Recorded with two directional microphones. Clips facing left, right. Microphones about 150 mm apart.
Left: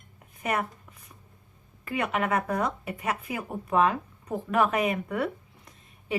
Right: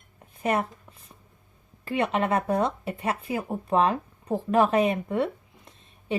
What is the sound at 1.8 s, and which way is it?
Speech, 30° right (ahead or behind).